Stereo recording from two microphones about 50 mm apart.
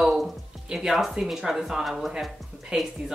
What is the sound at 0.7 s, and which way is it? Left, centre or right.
A woman's voice, centre.